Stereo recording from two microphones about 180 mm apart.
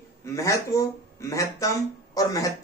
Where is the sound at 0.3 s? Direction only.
15° left (ahead or behind).